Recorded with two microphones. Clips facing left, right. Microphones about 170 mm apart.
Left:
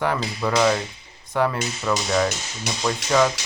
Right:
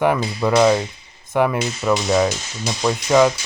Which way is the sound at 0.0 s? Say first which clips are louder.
Right 5 dB; 15° right (ahead or behind).